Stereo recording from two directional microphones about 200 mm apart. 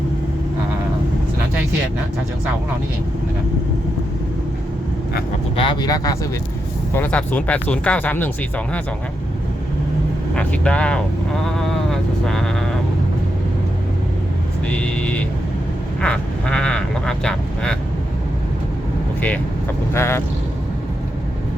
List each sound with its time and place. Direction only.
5.5 s speech: 25° left (ahead or behind)
6.9 s speech: 5° left (ahead or behind)
10.3 s speech: 5° left (ahead or behind)
11.4 s a sound: centre (ahead or behind)
14.7 s a sound: 5° left (ahead or behind)
16.0 s speech: 5° left (ahead or behind)
19.9 s speech: 15° left (ahead or behind)